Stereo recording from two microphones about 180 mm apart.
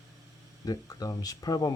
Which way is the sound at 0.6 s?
20° left (ahead or behind).